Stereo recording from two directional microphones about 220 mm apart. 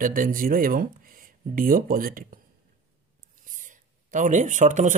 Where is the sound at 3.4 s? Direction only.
35° right (ahead or behind).